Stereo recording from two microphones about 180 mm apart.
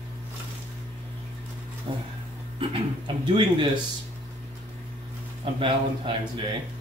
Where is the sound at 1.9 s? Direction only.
30° right (ahead or behind).